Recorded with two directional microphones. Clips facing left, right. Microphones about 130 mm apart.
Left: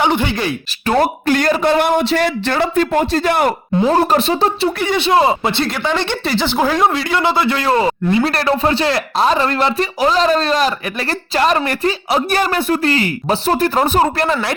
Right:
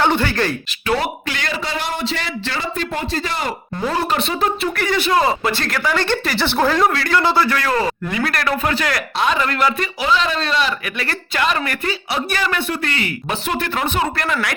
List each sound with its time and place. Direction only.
0.0 s speech: 15° left (ahead or behind)
0.9 s a man's voice: 45° left (ahead or behind); by 3.5 s 60° left (ahead or behind)
3.8 s speech: 40° left (ahead or behind)
4.8 s a man's voice: 20° left (ahead or behind)
10.0 s speech: 40° left (ahead or behind)